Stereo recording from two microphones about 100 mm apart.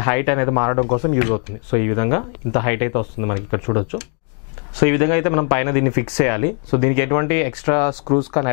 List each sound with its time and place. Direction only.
0.0 s speech: 20° left (ahead or behind)